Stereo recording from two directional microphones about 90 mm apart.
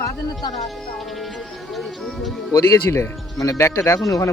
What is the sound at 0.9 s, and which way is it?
Music, centre (ahead or behind).